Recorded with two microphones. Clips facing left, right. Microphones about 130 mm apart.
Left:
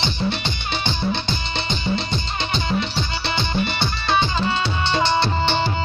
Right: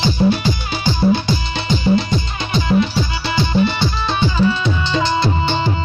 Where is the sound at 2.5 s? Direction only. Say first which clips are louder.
Right 8 dB; 25° left (ahead or behind).